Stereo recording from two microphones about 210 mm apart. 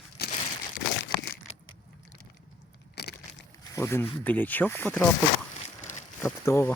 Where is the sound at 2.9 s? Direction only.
50° left (ahead or behind).